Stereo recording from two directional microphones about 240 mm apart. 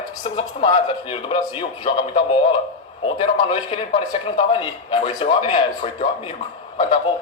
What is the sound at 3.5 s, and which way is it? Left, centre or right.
A woman's voice, left.